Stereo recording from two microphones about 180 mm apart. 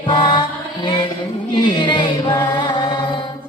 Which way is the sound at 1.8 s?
25° left (ahead or behind).